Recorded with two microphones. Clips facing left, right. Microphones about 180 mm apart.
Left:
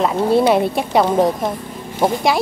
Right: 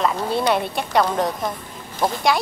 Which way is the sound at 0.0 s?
5° left (ahead or behind).